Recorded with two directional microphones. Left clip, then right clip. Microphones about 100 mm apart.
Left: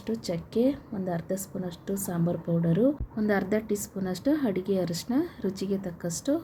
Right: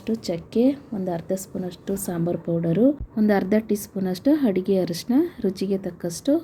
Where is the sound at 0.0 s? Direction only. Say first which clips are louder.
Right 5 dB; 40° right (ahead or behind).